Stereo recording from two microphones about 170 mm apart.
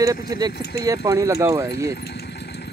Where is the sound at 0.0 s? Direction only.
20° right (ahead or behind).